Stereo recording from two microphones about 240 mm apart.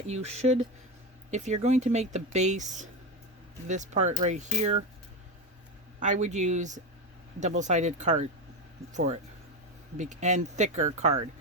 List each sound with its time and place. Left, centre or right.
0.1 s speech: right
6.0 s speech: right